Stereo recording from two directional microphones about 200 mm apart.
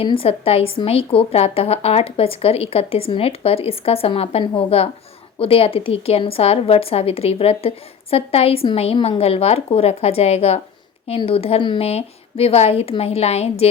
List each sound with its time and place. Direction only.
0.0 s a woman's voice: 25° left (ahead or behind)